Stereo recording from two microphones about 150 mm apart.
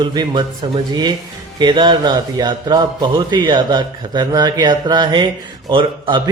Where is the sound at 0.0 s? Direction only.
30° right (ahead or behind).